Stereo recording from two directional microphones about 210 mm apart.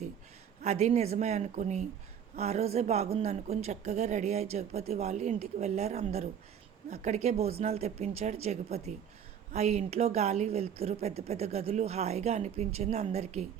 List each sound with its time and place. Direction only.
0.6 s a woman's voice: 35° right (ahead or behind)